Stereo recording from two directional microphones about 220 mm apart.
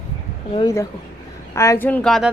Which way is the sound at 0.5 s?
15° left (ahead or behind).